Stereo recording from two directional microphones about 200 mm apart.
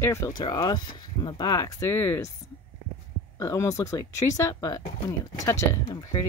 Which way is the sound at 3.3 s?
15° left (ahead or behind).